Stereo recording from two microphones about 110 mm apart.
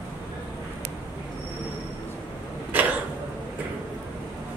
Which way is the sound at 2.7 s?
15° right (ahead or behind).